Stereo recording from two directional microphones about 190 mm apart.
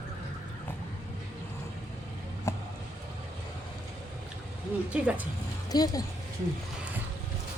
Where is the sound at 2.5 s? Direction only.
15° left (ahead or behind).